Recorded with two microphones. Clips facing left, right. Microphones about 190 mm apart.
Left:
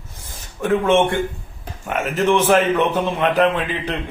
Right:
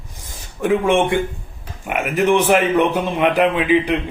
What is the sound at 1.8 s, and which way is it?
A man's voice, 15° right (ahead or behind).